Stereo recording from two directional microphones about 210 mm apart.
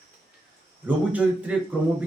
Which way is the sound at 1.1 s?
5° right (ahead or behind).